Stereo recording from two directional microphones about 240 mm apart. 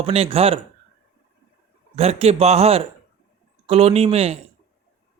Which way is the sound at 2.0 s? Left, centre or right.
Right.